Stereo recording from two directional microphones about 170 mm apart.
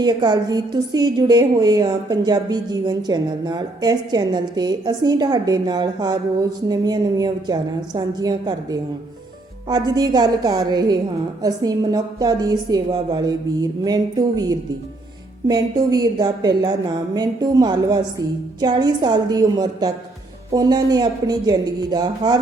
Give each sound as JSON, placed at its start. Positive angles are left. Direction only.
{"t": 0.0, "sound": "a woman's voice", "side_deg": -25}